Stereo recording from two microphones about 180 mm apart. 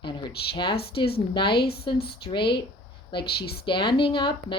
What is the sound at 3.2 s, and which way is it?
Speech, 60° left (ahead or behind).